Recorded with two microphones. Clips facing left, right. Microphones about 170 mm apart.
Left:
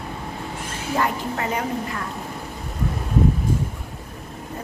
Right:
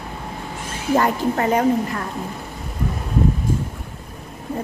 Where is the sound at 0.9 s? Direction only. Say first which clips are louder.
Right 5 dB; 45° right (ahead or behind).